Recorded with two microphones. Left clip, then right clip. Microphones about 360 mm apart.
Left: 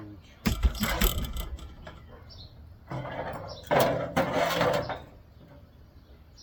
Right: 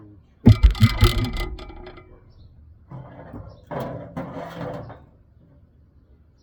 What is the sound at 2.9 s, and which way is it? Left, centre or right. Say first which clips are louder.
Mechanisms: left 7 dB; centre.